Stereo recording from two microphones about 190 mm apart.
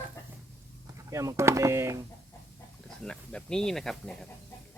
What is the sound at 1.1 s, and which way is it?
Speech, 15° right (ahead or behind).